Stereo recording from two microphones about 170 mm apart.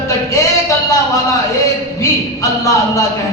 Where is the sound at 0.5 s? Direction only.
20° left (ahead or behind).